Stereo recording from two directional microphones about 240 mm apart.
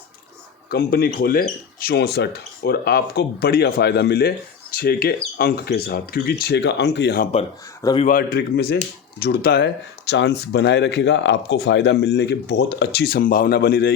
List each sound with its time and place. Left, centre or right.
0.7 s speech: left
7.8 s speech: centre
8.0 s speech: left